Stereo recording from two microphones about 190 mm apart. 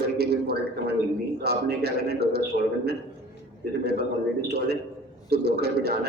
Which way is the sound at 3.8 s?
55° right (ahead or behind).